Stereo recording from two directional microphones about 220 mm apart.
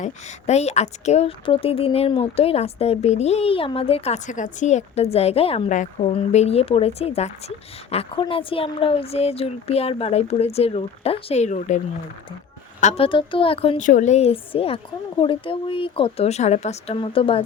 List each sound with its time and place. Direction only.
0.0 s speech: 30° left (ahead or behind)
12.8 s speech: 30° left (ahead or behind)